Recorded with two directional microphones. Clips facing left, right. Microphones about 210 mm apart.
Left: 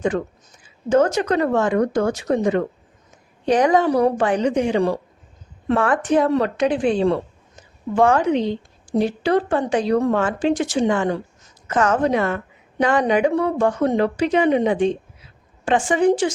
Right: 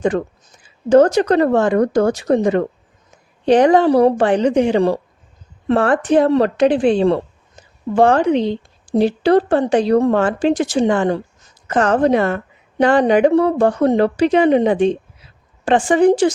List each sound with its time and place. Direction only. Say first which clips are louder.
0.9 s speech: right 6 dB; 35° right (ahead or behind)